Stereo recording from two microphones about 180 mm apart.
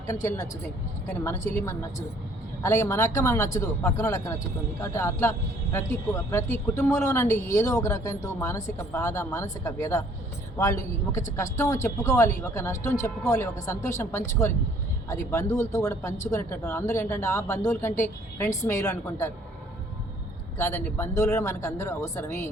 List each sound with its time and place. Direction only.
0.1 s a woman's voice: 20° left (ahead or behind)
20.6 s speech: 15° left (ahead or behind)